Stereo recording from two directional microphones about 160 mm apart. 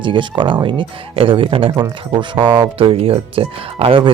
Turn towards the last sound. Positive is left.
turn(degrees=-35)  # may be behind; listen again after turning